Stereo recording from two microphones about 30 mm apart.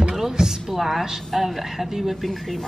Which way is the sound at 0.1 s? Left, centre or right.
Centre.